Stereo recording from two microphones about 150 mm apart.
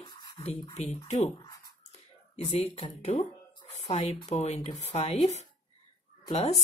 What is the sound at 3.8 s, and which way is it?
Speech, 35° left (ahead or behind).